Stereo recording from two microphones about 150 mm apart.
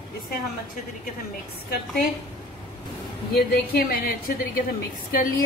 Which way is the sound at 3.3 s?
85° left.